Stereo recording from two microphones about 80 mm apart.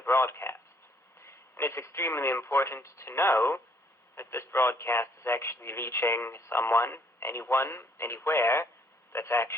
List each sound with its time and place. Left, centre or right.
0.0 s a man's voice: left